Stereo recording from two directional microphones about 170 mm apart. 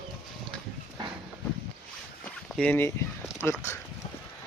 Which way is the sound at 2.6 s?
10° left (ahead or behind).